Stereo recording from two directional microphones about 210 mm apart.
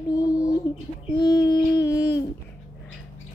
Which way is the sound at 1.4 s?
15° left (ahead or behind).